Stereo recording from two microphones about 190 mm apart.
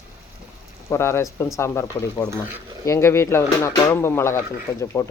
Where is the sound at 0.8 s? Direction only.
15° left (ahead or behind).